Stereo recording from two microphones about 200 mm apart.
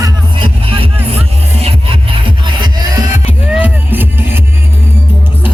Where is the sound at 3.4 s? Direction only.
5° right (ahead or behind).